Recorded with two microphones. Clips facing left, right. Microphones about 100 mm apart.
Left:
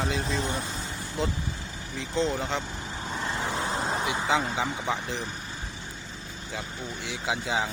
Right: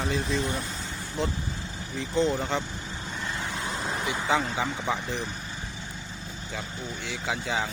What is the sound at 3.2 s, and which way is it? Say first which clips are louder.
Vehicle: left 3 dB; 30° left (ahead or behind).